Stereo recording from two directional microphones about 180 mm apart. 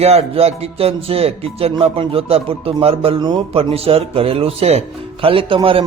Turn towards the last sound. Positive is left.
turn(degrees=-30)  # may be behind; listen again after turning